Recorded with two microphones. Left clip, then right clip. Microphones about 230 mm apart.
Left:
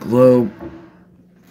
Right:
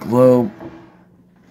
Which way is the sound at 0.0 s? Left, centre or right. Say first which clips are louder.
Even; centre.